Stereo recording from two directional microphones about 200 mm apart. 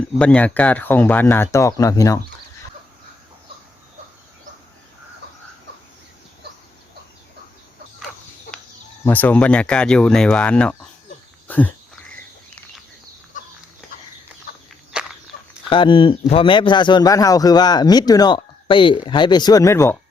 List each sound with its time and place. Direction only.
0.2 s speech: 5° left (ahead or behind)
9.0 s speech: 10° left (ahead or behind)
15.3 s a sound: 45° left (ahead or behind)
15.7 s a man's voice: 25° left (ahead or behind)